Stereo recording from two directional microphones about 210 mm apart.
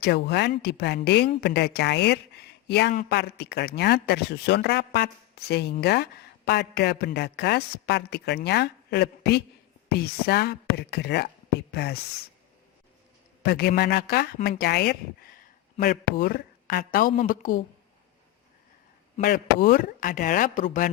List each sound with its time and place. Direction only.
0.0 s a woman's voice: 55° left (ahead or behind)
13.4 s a woman's voice: 50° left (ahead or behind)
19.2 s speech: 45° left (ahead or behind)